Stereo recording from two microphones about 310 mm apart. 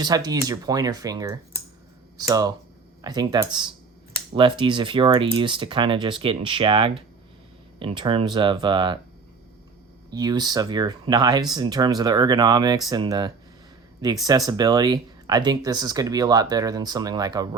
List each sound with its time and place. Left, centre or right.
0.0 s speech: centre
10.1 s speech: centre